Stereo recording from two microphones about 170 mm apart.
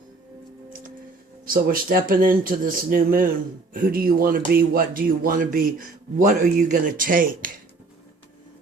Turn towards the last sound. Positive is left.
turn(degrees=-55)  # may be behind; listen again after turning